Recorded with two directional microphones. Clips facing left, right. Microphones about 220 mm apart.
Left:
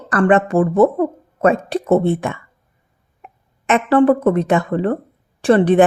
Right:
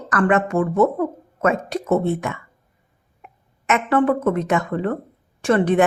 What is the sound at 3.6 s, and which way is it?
Speech, 30° left (ahead or behind).